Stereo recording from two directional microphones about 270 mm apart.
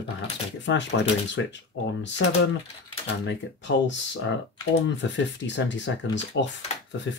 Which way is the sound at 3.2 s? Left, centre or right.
Left.